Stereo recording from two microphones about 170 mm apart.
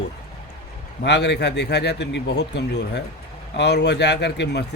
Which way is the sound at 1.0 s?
85° left.